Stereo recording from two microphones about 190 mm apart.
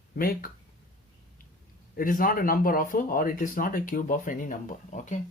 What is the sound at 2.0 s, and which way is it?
Speech, 45° left (ahead or behind).